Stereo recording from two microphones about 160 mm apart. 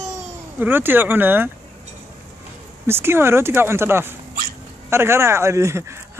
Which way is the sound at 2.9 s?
15° right (ahead or behind).